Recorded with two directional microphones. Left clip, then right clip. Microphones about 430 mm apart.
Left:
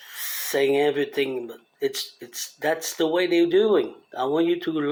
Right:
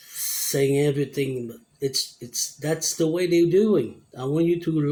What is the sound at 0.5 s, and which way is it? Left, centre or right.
Speech, centre.